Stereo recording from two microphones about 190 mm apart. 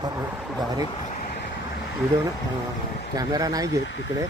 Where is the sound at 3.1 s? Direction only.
20° right (ahead or behind).